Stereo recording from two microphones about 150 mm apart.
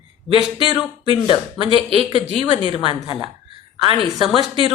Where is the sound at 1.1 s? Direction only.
35° left (ahead or behind).